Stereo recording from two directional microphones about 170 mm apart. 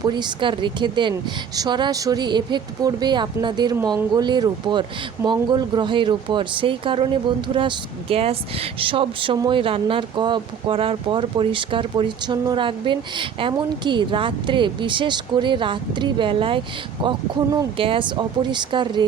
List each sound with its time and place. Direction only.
0.0 s speech: 25° right (ahead or behind)